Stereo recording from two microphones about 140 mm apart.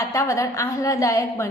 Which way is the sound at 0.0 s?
20° left (ahead or behind).